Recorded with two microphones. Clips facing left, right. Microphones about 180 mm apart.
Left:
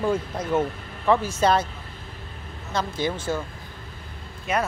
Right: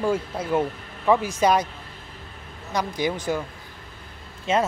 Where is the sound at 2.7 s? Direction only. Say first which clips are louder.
Right 1 dB; 15° right (ahead or behind).